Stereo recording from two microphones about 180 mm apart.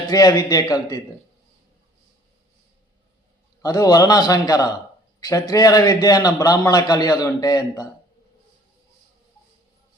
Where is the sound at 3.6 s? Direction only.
20° left (ahead or behind).